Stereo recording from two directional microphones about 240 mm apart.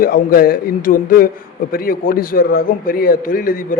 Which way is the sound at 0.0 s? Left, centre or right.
Left.